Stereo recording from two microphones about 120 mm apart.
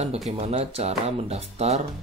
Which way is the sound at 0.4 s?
60° right (ahead or behind).